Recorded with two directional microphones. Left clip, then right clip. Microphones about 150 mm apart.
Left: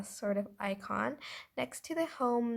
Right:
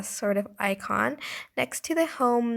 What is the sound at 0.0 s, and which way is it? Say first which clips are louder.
Speech: right 8 dB; 45° right (ahead or behind).